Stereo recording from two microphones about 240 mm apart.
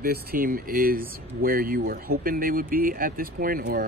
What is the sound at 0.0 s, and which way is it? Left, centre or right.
Speech, right.